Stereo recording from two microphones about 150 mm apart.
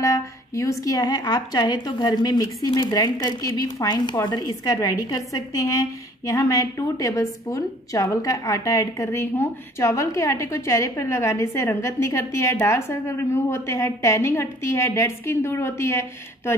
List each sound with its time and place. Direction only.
0.0 s a woman's voice: 20° left (ahead or behind)